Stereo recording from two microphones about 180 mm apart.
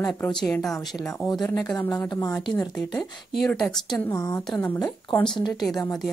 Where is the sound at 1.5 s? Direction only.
20° left (ahead or behind).